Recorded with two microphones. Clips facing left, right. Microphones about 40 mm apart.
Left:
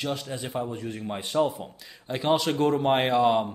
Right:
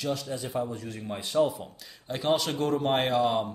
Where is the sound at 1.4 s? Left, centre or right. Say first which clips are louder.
Right 1 dB; centre.